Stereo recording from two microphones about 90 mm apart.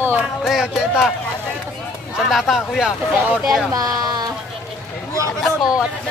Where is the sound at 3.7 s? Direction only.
45° right (ahead or behind).